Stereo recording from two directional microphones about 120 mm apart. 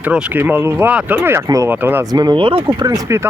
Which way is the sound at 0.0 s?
10° right (ahead or behind).